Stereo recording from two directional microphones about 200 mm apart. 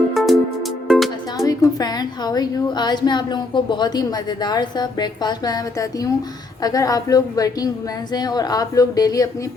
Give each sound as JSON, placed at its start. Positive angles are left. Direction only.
{"t": 0.1, "sound": "music", "side_deg": 0}
{"t": 1.4, "sound": "a woman's voice", "side_deg": 15}